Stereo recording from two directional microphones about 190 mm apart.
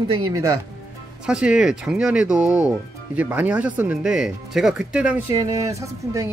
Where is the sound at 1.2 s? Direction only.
5° right (ahead or behind).